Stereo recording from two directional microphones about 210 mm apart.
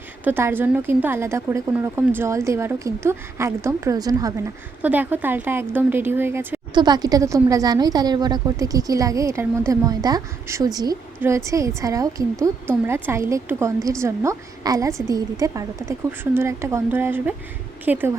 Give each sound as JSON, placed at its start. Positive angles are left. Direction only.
{"t": 0.3, "sound": "speech", "side_deg": -10}